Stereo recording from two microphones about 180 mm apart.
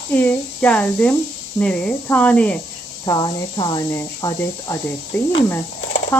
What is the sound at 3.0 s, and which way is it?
Speech, 25° left (ahead or behind).